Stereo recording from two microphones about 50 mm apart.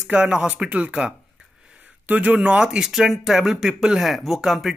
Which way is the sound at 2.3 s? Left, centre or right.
Right.